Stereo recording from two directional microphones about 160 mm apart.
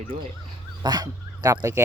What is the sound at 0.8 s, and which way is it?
Speech, 25° right (ahead or behind).